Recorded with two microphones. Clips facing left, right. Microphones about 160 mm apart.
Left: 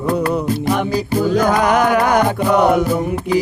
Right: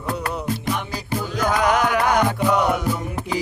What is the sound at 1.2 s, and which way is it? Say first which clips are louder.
Music: left 5 dB; 55° left (ahead or behind).